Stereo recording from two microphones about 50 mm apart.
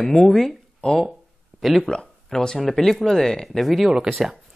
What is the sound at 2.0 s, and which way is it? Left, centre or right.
Speech, centre.